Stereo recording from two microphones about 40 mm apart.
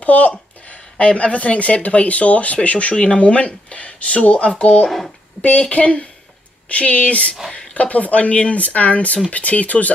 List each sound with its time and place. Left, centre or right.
0.0 s speech: left